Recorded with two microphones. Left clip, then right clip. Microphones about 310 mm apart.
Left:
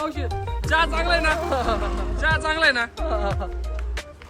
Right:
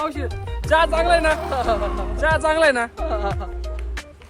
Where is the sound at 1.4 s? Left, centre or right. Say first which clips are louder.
Right 2 dB; centre.